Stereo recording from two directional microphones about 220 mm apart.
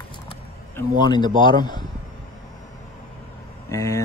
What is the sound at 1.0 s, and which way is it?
Speech, 20° left (ahead or behind).